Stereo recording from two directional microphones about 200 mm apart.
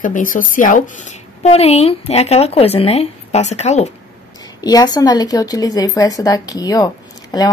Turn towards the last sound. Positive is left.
turn(degrees=20)  # may be behind; listen again after turning